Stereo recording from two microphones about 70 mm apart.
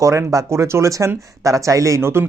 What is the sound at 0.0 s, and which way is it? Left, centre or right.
Speech, right.